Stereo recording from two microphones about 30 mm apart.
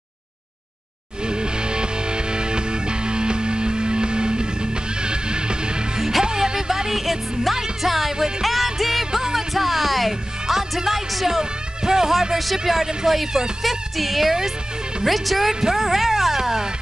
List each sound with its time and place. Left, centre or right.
1.2 s music: right
7.0 s music: centre; by 12.1 s right
12.1 s speech: centre